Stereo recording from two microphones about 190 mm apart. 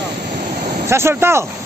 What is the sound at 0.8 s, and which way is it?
Speech, 15° right (ahead or behind).